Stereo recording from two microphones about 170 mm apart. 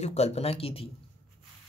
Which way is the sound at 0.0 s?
40° left (ahead or behind).